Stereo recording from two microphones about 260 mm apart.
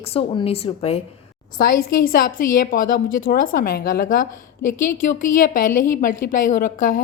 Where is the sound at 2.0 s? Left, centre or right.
Left.